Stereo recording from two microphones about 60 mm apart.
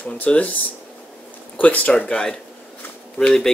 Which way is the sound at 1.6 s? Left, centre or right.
Left.